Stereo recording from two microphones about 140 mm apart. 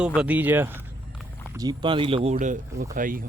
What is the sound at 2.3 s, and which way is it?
Speech, 65° right (ahead or behind).